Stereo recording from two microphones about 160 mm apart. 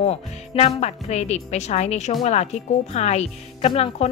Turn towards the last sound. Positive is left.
turn(degrees=40)  # may be behind; listen again after turning